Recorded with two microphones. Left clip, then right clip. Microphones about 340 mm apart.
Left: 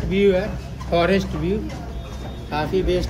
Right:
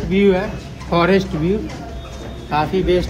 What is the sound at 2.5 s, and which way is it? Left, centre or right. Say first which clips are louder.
Speech: right 5 dB; centre.